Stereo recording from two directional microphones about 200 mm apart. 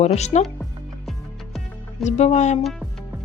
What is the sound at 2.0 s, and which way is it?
Speech, 35° left (ahead or behind).